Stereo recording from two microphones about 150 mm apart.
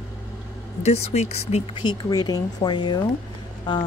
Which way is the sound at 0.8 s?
45° left (ahead or behind).